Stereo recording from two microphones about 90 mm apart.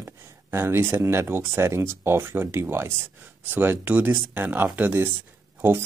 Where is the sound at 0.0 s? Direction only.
25° right (ahead or behind).